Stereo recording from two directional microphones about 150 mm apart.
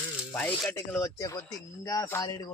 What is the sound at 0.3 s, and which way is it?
Speech, 10° left (ahead or behind).